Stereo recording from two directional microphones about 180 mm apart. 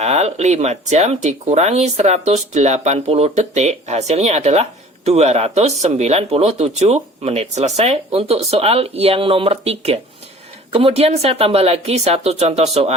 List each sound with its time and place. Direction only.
0.0 s speech: 40° right (ahead or behind)